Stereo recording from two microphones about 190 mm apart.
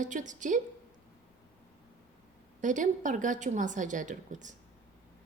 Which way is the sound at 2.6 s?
40° right (ahead or behind).